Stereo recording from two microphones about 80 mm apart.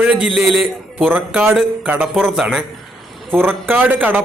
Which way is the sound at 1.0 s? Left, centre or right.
Centre.